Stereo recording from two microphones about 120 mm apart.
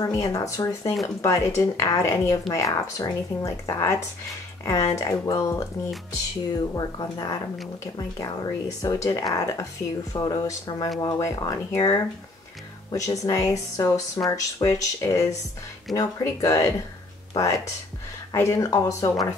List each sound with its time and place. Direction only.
0.0 s speech: 30° left (ahead or behind)
6.7 s speech: 35° left (ahead or behind)